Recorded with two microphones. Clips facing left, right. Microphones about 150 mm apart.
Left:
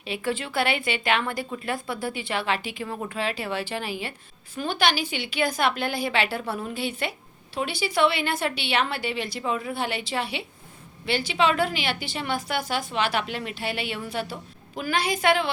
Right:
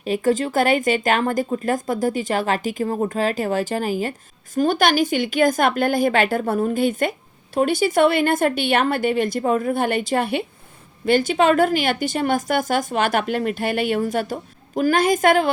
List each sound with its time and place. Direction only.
0.0 s a woman's voice: 45° right (ahead or behind)